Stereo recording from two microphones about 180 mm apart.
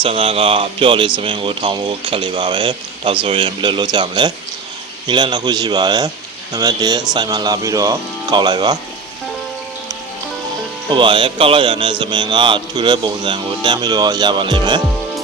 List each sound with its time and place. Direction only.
0.0 s speech: 30° right (ahead or behind)
10.9 s speech: 25° right (ahead or behind)